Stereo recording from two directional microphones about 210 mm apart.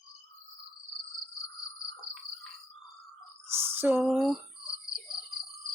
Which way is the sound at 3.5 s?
10° right (ahead or behind).